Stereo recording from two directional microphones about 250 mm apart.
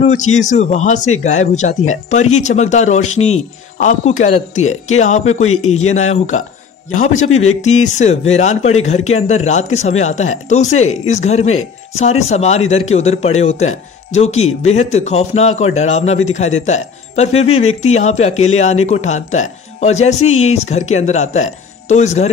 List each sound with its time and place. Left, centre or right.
0.0 s speech: left